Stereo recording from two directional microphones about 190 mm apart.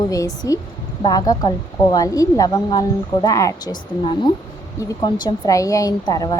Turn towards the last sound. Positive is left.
turn(degrees=20)  # may be behind; listen again after turning